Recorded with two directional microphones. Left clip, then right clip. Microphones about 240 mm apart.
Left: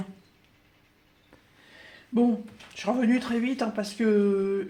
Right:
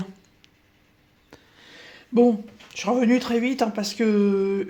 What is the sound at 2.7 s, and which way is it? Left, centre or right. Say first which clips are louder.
Speech: right 5 dB; right.